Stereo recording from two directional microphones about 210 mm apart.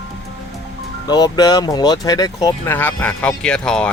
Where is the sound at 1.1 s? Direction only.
20° left (ahead or behind).